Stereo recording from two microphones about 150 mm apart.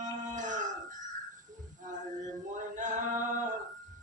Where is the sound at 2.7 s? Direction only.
55° right (ahead or behind).